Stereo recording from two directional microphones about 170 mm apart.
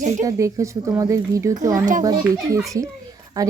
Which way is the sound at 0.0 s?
45° right (ahead or behind).